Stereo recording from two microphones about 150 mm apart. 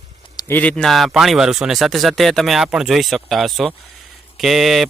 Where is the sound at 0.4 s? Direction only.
10° left (ahead or behind).